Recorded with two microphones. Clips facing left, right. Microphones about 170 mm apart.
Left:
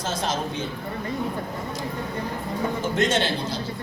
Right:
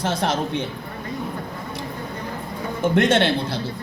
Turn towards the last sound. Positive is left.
turn(degrees=-60)  # may be behind; listen again after turning